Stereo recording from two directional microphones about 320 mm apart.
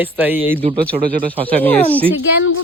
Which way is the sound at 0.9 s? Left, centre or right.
Right.